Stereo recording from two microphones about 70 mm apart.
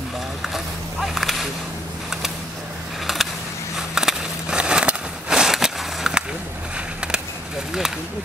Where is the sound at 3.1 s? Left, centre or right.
Centre.